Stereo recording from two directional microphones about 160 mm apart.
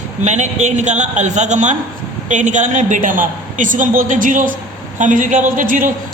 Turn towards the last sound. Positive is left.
turn(degrees=-55)  # may be behind; listen again after turning